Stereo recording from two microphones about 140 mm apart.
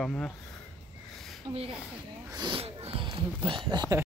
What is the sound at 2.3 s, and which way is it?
Speech, 35° right (ahead or behind).